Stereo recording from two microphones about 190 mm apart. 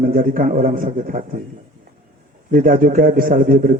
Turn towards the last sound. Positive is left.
turn(degrees=-45)  # may be behind; listen again after turning